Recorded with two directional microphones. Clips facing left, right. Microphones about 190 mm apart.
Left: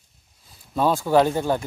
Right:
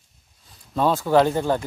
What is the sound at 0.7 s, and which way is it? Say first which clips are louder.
Speech: even; 10° left (ahead or behind).